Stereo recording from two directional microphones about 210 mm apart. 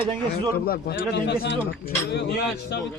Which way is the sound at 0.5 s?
45° left (ahead or behind).